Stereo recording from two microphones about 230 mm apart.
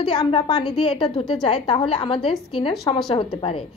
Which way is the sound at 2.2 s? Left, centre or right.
Centre.